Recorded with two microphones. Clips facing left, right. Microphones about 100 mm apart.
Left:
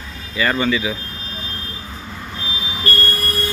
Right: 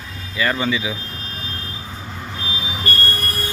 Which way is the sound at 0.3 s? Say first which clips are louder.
Left 2 dB; centre (ahead or behind).